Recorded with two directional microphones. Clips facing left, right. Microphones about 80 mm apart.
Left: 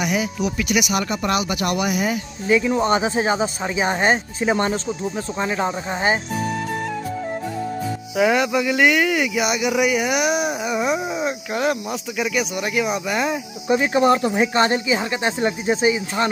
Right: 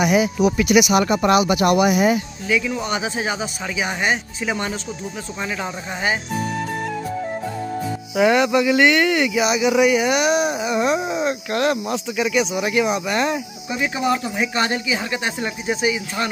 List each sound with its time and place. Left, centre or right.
0.0 s speech: centre
2.4 s speech: left
8.2 s speech: centre
13.7 s speech: left